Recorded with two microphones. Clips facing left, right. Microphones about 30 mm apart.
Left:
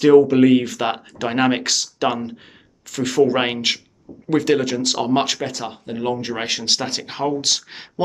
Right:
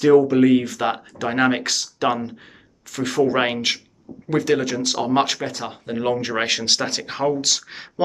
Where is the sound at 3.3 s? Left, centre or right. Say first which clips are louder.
Even; centre.